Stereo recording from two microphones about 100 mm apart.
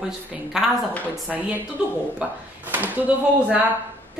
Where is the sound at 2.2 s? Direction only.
15° right (ahead or behind).